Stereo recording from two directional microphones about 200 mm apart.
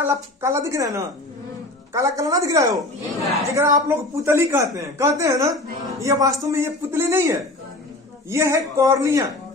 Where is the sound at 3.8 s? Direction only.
15° right (ahead or behind).